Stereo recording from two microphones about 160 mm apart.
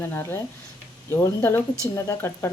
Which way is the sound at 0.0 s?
15° left (ahead or behind).